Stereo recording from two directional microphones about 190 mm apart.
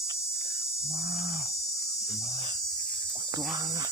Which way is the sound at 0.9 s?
15° right (ahead or behind).